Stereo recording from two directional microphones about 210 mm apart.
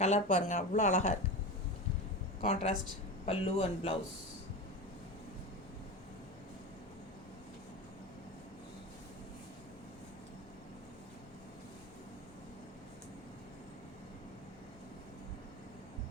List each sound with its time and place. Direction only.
0.0 s speech: 35° left (ahead or behind)
2.4 s a man's voice: 30° left (ahead or behind)